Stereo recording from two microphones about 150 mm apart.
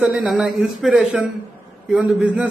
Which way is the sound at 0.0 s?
5° right (ahead or behind).